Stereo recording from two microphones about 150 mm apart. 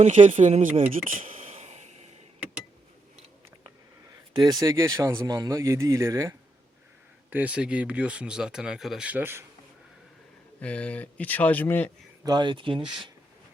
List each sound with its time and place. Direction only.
0.0 s speech: 50° right (ahead or behind)
1.2 s a sound: 40° right (ahead or behind)
4.4 s speech: 25° right (ahead or behind)
10.6 s speech: 10° left (ahead or behind)
12.2 s speech: 30° right (ahead or behind)